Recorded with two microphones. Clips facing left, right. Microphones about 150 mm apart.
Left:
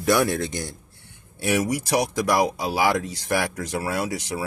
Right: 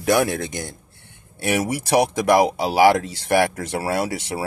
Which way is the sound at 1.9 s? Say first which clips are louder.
Right 6 dB; 60° right (ahead or behind).